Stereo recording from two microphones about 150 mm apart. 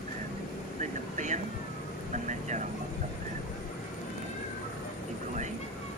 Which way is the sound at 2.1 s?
55° right (ahead or behind).